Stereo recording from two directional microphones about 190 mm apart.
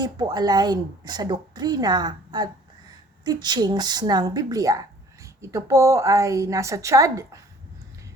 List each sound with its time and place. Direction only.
0.0 s a woman's voice: 20° right (ahead or behind)